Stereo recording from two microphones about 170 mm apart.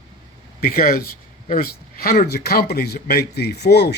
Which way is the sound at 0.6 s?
60° left (ahead or behind).